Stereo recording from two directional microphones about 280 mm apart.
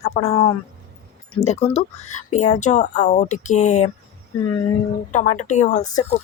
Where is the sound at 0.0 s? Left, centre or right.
Left.